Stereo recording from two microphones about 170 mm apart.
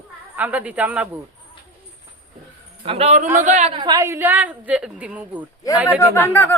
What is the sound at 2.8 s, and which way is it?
Speech, 35° right (ahead or behind).